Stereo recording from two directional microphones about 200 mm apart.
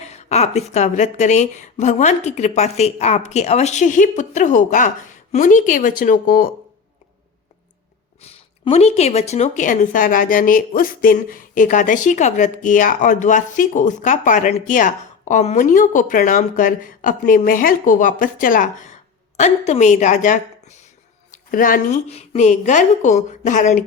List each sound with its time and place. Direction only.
0.0 s speech: 35° left (ahead or behind)
8.2 s speech: 30° left (ahead or behind)